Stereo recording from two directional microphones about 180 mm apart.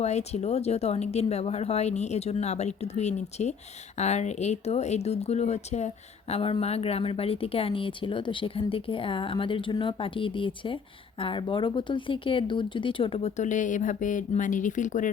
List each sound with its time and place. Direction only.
0.0 s speech: 40° left (ahead or behind)